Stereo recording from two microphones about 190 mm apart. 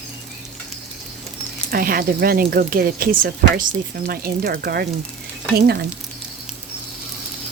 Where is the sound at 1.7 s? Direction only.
50° right (ahead or behind).